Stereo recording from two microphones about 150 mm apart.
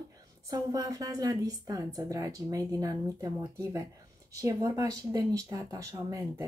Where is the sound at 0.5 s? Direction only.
25° right (ahead or behind).